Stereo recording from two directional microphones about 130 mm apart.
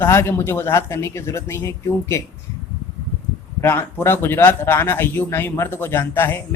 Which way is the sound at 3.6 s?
15° left (ahead or behind).